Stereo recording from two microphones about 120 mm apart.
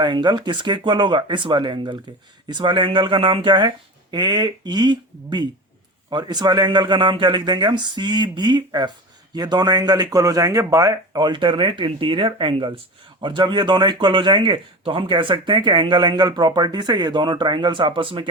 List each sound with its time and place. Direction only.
0.0 s speech: 40° right (ahead or behind)
11.3 s speech: 45° right (ahead or behind)